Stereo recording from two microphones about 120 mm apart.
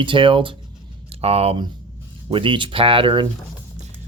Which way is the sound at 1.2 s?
55° right (ahead or behind).